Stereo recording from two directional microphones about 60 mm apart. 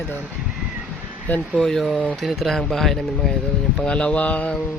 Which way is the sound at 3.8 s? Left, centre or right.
Centre.